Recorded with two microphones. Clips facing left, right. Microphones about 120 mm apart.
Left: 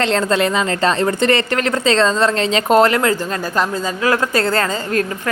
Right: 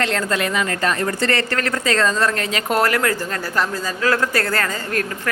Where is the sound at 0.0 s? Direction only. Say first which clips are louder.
Left 5 dB; 25° left (ahead or behind).